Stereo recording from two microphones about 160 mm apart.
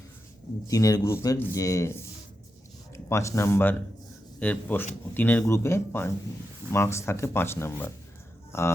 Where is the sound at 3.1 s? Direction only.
20° left (ahead or behind).